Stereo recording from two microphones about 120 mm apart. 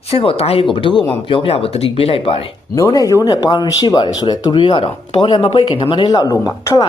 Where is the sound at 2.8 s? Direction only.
25° left (ahead or behind).